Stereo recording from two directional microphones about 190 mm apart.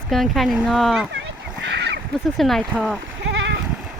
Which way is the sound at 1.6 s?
65° right (ahead or behind).